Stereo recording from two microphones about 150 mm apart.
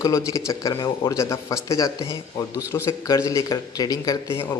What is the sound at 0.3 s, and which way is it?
Speech, 20° left (ahead or behind).